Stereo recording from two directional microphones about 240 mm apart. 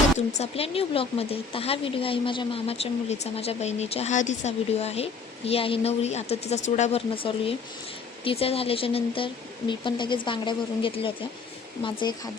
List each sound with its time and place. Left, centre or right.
0.3 s speech: left